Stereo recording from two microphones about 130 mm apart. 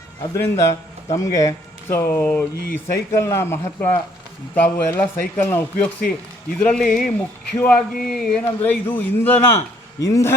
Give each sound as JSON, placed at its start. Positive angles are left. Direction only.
{"t": 0.4, "sound": "speech", "side_deg": 20}
{"t": 8.4, "sound": "speech", "side_deg": 15}